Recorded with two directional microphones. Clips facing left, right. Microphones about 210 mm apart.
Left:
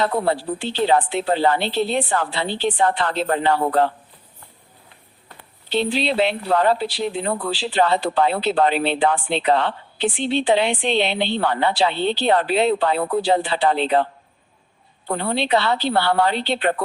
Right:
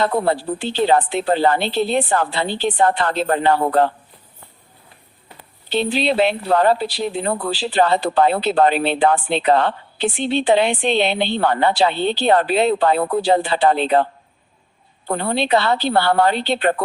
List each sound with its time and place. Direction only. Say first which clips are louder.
0.0 s speech: right 2 dB; 45° right (ahead or behind)
5.4 s speech: right 1 dB; 50° right (ahead or behind)